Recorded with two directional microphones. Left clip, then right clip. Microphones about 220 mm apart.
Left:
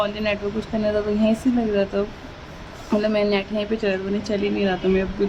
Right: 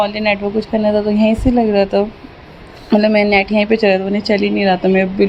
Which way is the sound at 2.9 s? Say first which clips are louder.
Right 8 dB; 20° right (ahead or behind).